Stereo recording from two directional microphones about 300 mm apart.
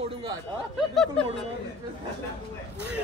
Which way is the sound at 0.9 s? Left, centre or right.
Centre.